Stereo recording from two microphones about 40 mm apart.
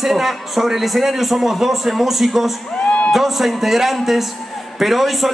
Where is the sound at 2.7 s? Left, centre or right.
Left.